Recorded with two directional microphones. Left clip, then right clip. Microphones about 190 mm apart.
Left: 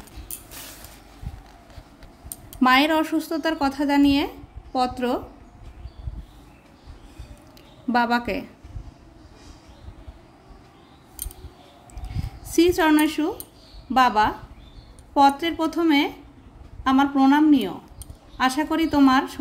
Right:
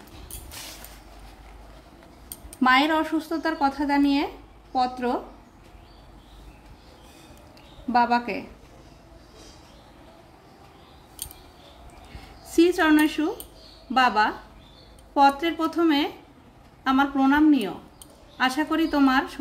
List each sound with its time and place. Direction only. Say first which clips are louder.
2.6 s speech: left 2 dB; 35° left (ahead or behind)
7.9 s speech: even; 40° left (ahead or behind)
12.4 s a woman's voice: left 1 dB; 25° left (ahead or behind)